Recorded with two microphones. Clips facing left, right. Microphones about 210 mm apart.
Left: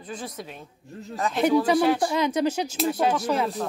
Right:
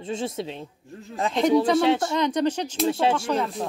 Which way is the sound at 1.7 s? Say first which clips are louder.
Right 1 dB; 25° right (ahead or behind).